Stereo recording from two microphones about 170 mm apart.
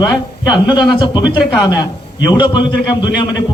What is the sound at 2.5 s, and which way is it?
Speech, 25° left (ahead or behind).